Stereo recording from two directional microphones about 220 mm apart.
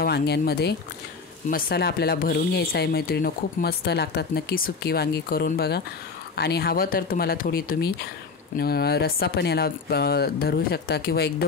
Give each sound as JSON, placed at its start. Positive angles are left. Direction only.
{"t": 0.0, "sound": "speech", "side_deg": 45}